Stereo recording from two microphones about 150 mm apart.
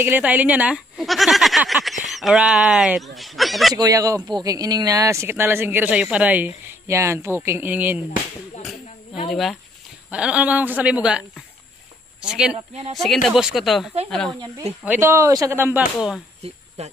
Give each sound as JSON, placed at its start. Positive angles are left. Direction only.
{"t": 0.0, "sound": "speech", "side_deg": -10}
{"t": 3.7, "sound": "speech", "side_deg": -25}
{"t": 9.3, "sound": "speech", "side_deg": 0}
{"t": 14.9, "sound": "speech", "side_deg": -20}
{"t": 16.4, "sound": "speech", "side_deg": -45}